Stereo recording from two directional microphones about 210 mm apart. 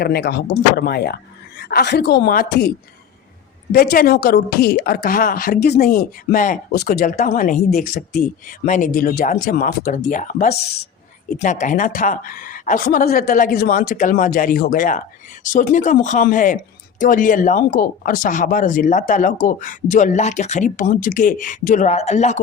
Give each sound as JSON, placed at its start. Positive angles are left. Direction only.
{"t": 0.0, "sound": "speech", "side_deg": 50}